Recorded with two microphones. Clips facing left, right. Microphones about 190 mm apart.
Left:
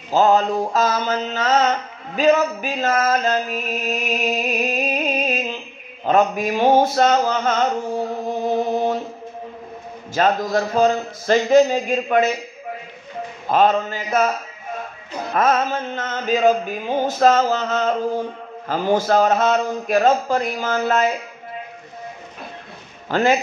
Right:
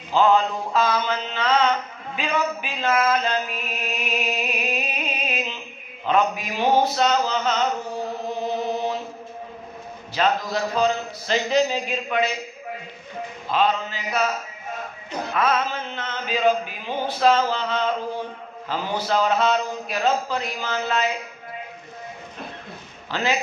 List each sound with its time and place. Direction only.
0.1 s mantra: 40° left (ahead or behind)
6.0 s music: 45° left (ahead or behind)
8.5 s chant: 50° left (ahead or behind)
10.1 s music: 50° left (ahead or behind)
13.5 s music: 45° left (ahead or behind)
15.3 s music: 45° left (ahead or behind)
23.0 s speech: 50° left (ahead or behind)